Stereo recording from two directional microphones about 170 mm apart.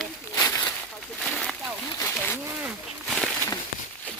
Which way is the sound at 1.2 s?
5° left (ahead or behind).